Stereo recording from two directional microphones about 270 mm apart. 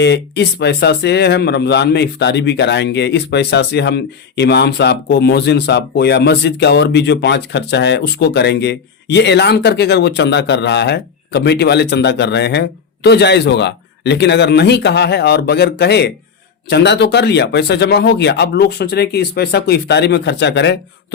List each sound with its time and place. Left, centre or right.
0.0 s speech: left